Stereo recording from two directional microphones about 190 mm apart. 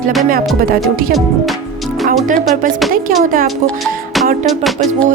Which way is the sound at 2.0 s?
45° right (ahead or behind).